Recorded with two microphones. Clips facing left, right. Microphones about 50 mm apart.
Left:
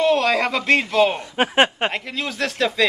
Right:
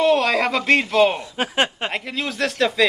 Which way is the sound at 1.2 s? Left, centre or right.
Left.